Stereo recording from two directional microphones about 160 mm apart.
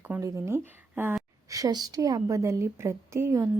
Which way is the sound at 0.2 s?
15° right (ahead or behind).